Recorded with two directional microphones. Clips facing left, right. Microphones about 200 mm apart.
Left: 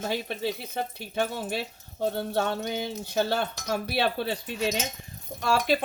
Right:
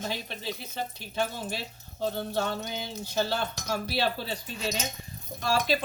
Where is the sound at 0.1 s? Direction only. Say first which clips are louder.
Left 6 dB; 55° left (ahead or behind).